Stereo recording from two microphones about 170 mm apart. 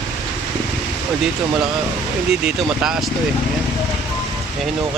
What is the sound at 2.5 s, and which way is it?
Speech, 5° right (ahead or behind).